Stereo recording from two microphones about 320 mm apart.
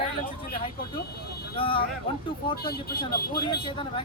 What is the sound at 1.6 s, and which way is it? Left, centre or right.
Speech, centre.